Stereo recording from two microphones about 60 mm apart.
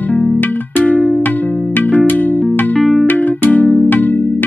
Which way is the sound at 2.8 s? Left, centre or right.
Centre.